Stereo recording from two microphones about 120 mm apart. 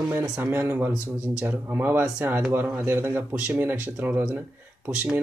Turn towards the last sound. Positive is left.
turn(degrees=-10)  # may be behind; listen again after turning